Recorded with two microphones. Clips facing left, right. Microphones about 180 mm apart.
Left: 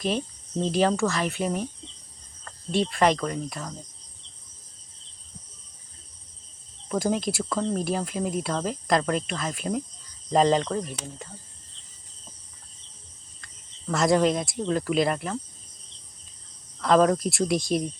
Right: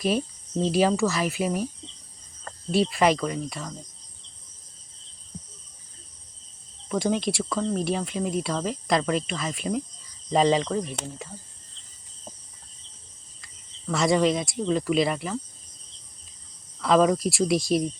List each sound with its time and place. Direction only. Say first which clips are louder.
0.6 s speech: right 1 dB; 5° right (ahead or behind)
2.7 s speech: right 1 dB; 5° right (ahead or behind)
6.8 s speech: right 1 dB; centre (ahead or behind)
13.4 s speech: right 1 dB; centre (ahead or behind)
16.8 s speech: even; 5° right (ahead or behind)